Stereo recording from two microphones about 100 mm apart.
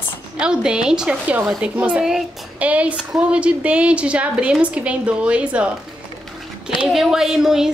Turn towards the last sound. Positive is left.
turn(degrees=-5)  # may be behind; listen again after turning